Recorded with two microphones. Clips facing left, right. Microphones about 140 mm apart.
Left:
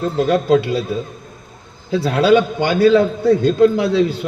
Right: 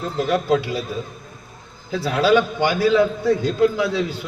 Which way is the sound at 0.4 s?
65° left (ahead or behind).